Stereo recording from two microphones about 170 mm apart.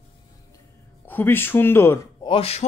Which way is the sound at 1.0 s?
10° left (ahead or behind).